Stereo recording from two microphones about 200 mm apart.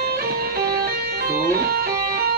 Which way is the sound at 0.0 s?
50° right (ahead or behind).